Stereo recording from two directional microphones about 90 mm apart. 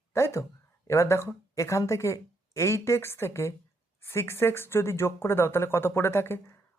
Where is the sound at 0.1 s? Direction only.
30° left (ahead or behind).